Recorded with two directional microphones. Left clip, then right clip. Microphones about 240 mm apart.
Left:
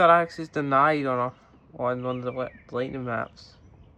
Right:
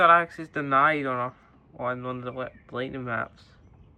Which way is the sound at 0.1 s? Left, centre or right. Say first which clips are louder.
Even; centre.